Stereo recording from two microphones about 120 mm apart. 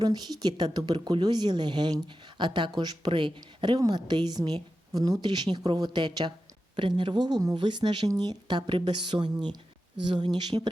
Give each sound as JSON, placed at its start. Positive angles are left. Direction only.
{"t": 0.0, "sound": "a woman's voice", "side_deg": -35}